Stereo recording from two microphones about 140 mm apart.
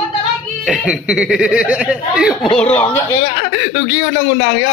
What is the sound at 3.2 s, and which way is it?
Speech, 80° left.